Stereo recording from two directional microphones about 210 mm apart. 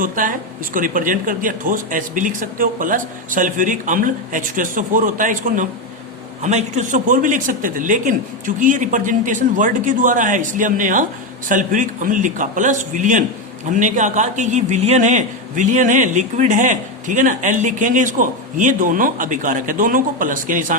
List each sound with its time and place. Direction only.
0.0 s a man's voice: 40° right (ahead or behind)